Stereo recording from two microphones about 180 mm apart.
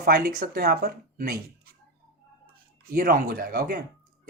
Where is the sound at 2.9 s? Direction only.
55° right (ahead or behind).